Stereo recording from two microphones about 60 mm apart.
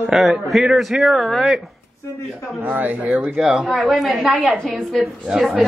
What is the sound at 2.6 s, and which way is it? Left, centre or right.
Speech, right.